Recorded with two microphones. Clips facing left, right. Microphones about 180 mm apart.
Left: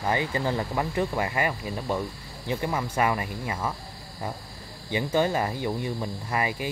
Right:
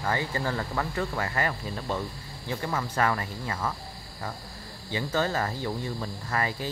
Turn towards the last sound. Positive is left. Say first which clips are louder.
# left 2 dB
turn(degrees=15)  # may be behind; listen again after turning